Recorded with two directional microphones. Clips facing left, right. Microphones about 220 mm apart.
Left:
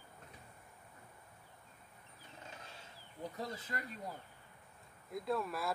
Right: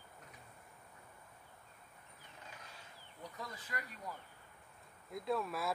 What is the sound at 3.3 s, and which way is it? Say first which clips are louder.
Speech: left 2 dB; 25° left (ahead or behind).